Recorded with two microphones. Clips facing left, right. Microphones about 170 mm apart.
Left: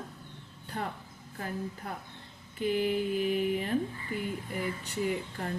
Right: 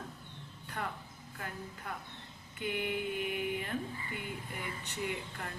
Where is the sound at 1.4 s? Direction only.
40° left (ahead or behind).